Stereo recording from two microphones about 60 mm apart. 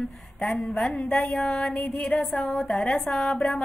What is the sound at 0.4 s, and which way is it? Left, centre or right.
A woman's voice, centre.